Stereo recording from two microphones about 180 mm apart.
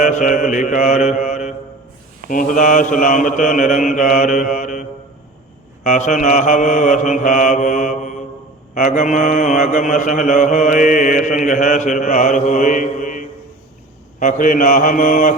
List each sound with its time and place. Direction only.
0.0 s mantra: 45° left (ahead or behind)